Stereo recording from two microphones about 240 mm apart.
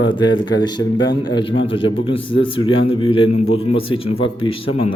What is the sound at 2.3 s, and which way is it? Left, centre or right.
Speech, left.